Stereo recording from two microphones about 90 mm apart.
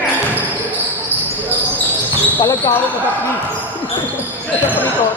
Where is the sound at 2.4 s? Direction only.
50° left (ahead or behind).